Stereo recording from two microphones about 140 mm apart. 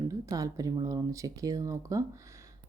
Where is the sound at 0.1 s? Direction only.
25° right (ahead or behind).